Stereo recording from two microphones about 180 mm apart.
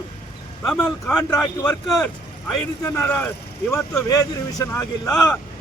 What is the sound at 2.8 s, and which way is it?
A man's voice, 15° left (ahead or behind).